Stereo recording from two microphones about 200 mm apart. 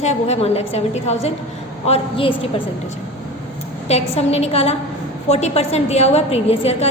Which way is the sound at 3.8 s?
30° left (ahead or behind).